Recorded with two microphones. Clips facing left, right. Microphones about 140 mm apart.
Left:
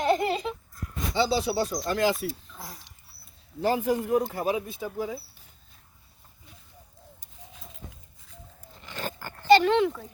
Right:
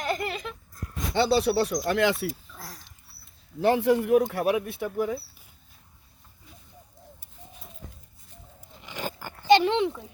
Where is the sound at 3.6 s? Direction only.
75° right (ahead or behind).